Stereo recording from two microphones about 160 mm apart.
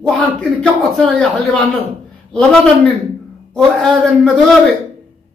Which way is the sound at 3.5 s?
Centre (ahead or behind).